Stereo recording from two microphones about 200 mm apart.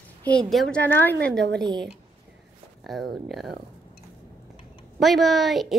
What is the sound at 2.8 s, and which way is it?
Speech, centre (ahead or behind).